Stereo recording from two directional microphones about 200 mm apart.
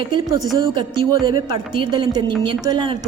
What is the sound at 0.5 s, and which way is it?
A woman's voice, 25° right (ahead or behind).